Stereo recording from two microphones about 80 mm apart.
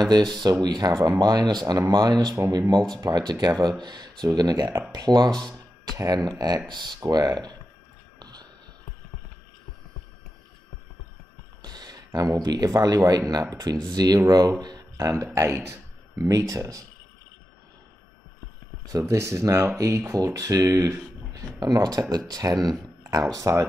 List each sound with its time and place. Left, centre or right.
0.0 s speech: right
3.0 s speech: right
6.7 s speech: right
7.0 s speech: right
8.2 s whispering: right
11.6 s speech: right
18.9 s speech: right